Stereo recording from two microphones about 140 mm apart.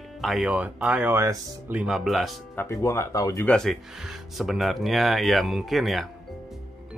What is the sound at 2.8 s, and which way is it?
Speech, 20° left (ahead or behind).